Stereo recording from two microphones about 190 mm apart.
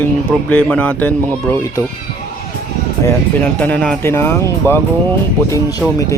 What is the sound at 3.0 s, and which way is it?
Speech, 10° left (ahead or behind).